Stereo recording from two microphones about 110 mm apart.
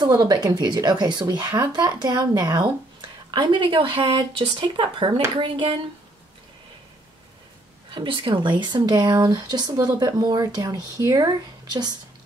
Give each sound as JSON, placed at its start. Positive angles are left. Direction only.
{"t": 0.0, "sound": "speech", "side_deg": -40}
{"t": 7.9, "sound": "speech", "side_deg": -50}